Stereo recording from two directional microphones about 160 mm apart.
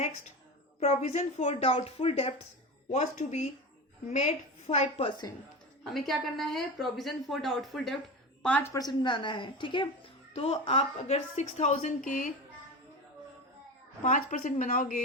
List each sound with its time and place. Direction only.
0.8 s a woman's voice: 40° left (ahead or behind)
5.8 s a woman's voice: centre (ahead or behind); by 12.3 s 55° left (ahead or behind)
14.0 s a woman's voice: 50° left (ahead or behind)